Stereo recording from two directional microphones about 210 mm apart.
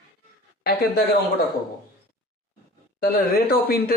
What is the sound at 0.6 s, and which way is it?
Speech, 50° left (ahead or behind).